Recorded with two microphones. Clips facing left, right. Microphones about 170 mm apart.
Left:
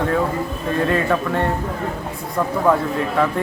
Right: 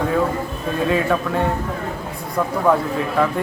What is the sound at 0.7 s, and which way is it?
Speech, centre (ahead or behind).